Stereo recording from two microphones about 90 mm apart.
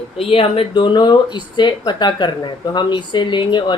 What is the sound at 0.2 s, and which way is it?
Speech, 90° left.